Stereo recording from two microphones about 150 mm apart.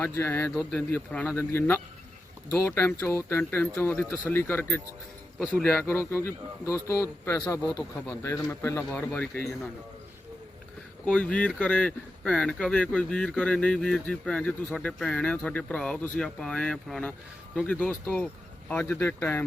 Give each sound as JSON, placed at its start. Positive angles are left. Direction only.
{"t": 0.1, "sound": "speech", "side_deg": 15}
{"t": 0.5, "sound": "a man's voice", "side_deg": 0}
{"t": 0.8, "sound": "speech", "side_deg": 10}
{"t": 11.0, "sound": "speech", "side_deg": 10}